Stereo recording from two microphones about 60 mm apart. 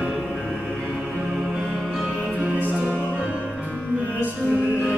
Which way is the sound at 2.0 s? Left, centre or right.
Right.